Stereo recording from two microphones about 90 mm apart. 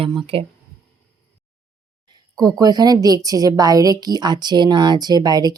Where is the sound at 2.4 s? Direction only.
45° right (ahead or behind).